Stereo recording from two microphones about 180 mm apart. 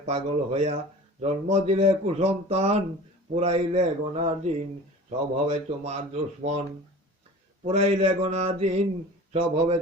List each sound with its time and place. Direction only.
0.0 s speech: 35° right (ahead or behind)
7.6 s speech: 35° right (ahead or behind)